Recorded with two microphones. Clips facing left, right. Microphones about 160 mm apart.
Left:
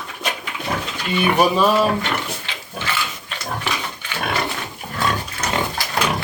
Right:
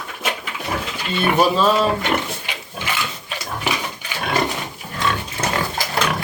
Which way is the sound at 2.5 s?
15° right (ahead or behind).